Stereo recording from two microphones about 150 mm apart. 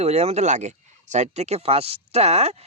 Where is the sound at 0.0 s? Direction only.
45° right (ahead or behind).